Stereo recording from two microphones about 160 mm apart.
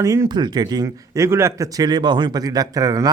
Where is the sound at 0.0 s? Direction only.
20° right (ahead or behind).